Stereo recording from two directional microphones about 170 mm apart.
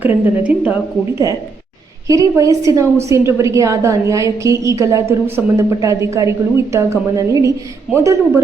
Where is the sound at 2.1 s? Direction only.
20° right (ahead or behind).